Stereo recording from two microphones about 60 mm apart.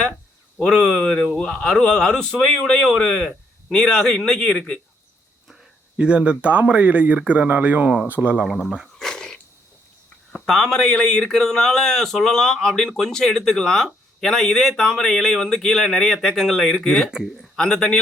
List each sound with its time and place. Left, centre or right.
0.6 s speech: centre
6.0 s speech: centre
9.0 s cat: centre
10.4 s a man's voice: centre